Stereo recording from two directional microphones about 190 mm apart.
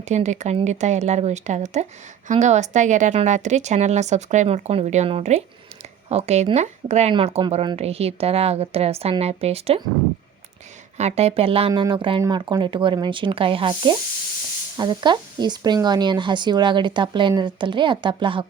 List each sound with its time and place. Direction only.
0.0 s speech: 35° right (ahead or behind)
10.9 s speech: 35° right (ahead or behind)